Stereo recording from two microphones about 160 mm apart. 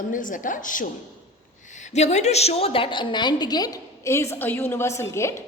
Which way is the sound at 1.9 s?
45° left (ahead or behind).